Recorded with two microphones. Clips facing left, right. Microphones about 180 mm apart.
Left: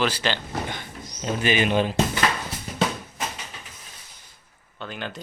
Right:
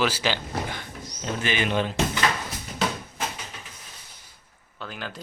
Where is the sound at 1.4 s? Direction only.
15° left (ahead or behind).